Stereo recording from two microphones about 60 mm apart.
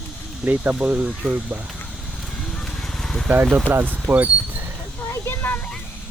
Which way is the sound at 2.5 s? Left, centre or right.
Centre.